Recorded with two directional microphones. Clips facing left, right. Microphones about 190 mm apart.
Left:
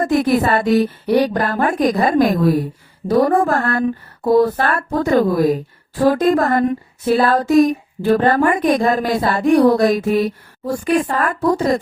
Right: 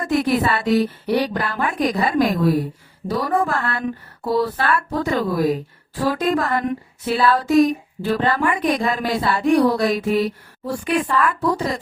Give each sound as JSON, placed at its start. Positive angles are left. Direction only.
{"t": 0.0, "sound": "speech", "side_deg": 45}